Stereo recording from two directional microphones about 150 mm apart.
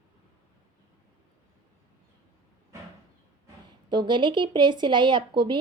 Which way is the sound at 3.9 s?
30° right (ahead or behind).